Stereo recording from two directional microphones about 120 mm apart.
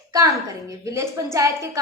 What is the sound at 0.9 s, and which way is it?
Speech, 25° right (ahead or behind).